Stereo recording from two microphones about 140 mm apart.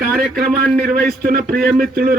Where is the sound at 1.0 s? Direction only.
90° right.